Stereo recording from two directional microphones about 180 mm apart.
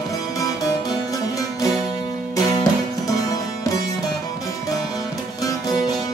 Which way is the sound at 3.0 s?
20° left (ahead or behind).